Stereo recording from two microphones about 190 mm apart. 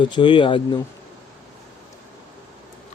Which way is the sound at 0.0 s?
25° left (ahead or behind).